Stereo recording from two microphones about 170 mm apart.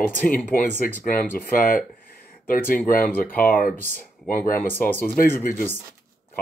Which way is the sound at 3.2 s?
10° left (ahead or behind).